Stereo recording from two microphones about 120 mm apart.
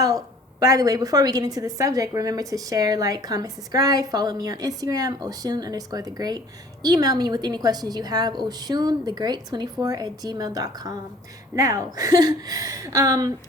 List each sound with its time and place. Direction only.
0.6 s a woman's voice: 30° right (ahead or behind)